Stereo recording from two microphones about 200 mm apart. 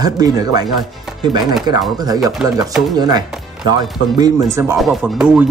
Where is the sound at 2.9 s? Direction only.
20° right (ahead or behind).